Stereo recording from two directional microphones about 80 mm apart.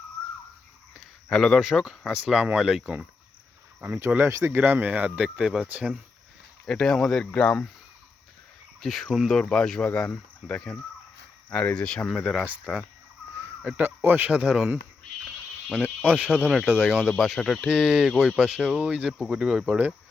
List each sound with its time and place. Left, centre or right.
1.3 s speech: centre
3.8 s speech: right; by 5.6 s centre
6.7 s speech: centre
8.8 s speech: centre
12.0 s speech: centre
13.7 s speech: right
14.3 s speech: centre
15.8 s speech: centre
17.1 s speech: centre
17.7 s speech: centre